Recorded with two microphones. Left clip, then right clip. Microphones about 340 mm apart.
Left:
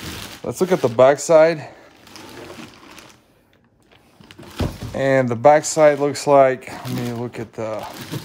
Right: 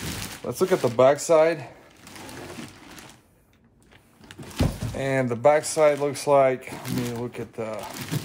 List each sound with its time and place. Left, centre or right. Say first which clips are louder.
0.5 s speech: left 4 dB; left
4.9 s speech: left 9 dB; left